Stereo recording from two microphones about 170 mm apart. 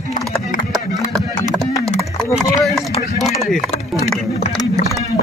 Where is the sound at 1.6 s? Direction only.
Centre (ahead or behind).